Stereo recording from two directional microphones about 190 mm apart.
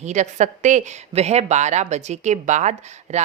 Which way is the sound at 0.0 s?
40° right (ahead or behind).